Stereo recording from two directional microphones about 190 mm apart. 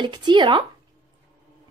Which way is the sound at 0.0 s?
25° right (ahead or behind).